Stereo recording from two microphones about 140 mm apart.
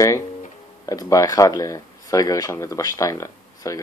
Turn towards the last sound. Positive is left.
turn(degrees=25)  # may be behind; listen again after turning